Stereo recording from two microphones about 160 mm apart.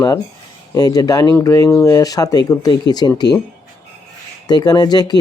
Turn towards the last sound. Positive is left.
turn(degrees=25)  # may be behind; listen again after turning